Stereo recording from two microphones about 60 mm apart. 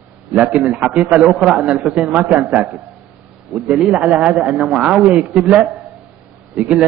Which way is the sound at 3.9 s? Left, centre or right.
Right.